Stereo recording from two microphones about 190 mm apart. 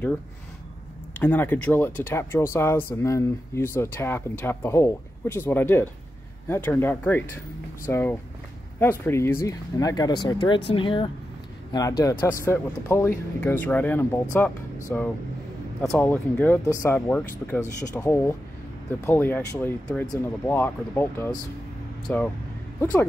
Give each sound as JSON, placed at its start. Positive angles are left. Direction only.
{"t": 1.2, "sound": "speech", "side_deg": 10}